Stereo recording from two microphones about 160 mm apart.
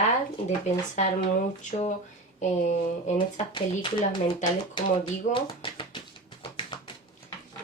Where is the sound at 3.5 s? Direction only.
30° left (ahead or behind).